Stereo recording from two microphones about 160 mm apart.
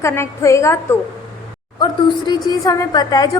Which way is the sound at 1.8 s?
25° left (ahead or behind).